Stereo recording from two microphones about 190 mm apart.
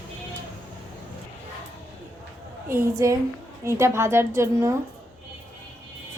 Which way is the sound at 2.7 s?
15° right (ahead or behind).